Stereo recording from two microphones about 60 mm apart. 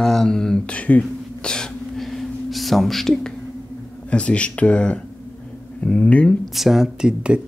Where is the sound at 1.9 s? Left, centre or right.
Centre.